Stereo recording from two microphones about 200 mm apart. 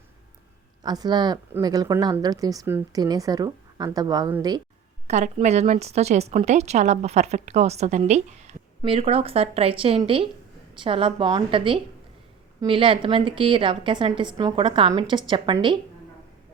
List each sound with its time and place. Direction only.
0.8 s a woman's voice: 20° right (ahead or behind)
5.0 s a woman's voice: 35° right (ahead or behind)